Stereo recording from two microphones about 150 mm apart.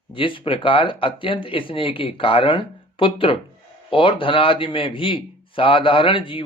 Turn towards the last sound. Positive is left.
turn(degrees=35)  # may be behind; listen again after turning